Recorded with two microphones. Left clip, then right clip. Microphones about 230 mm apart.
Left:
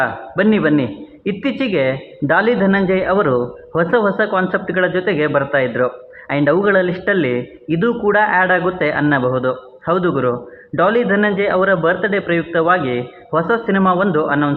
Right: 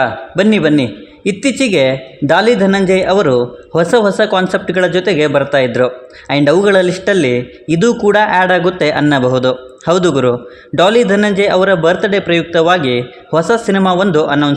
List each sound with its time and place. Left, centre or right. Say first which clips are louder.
0.0 s a man's voice: right 4 dB; right